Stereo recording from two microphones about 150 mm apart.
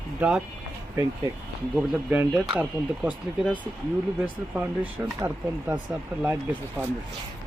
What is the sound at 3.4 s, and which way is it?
Speech, 10° left (ahead or behind).